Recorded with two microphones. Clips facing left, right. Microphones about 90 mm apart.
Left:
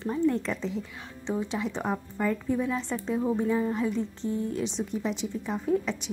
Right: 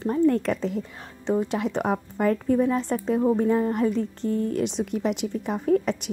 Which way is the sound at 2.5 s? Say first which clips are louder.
Right 6 dB; 40° right (ahead or behind).